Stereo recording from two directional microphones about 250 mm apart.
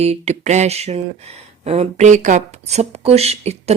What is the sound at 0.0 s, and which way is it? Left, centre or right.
A woman's voice, right.